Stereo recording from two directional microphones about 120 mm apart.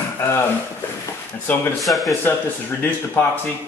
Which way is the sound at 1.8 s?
Centre (ahead or behind).